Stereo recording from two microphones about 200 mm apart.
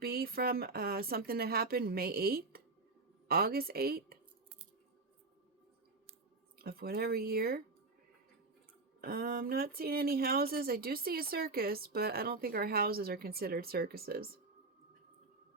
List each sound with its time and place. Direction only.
0.0 s a woman's voice: 50° right (ahead or behind)
6.6 s a woman's voice: 50° right (ahead or behind)
9.0 s a woman's voice: 50° right (ahead or behind)